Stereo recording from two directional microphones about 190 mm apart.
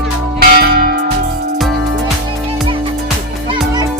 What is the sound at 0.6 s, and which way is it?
Church bell, 55° right (ahead or behind).